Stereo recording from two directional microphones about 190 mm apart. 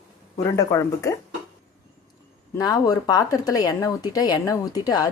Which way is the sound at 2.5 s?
20° left (ahead or behind).